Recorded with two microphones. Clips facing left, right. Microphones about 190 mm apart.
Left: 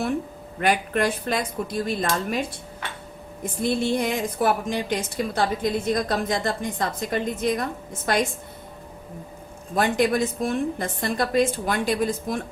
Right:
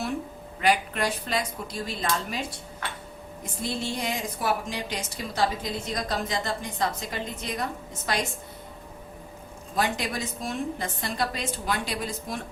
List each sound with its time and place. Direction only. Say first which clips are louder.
0.6 s a woman's voice: left 3 dB; 55° left (ahead or behind)
3.6 s a woman's voice: left 8 dB; 55° left (ahead or behind)
9.7 s a woman's voice: left 7 dB; 55° left (ahead or behind)